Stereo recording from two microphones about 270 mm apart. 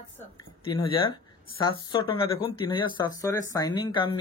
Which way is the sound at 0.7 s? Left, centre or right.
Centre.